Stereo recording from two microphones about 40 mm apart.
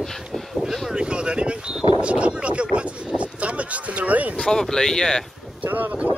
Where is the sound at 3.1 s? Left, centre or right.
Right.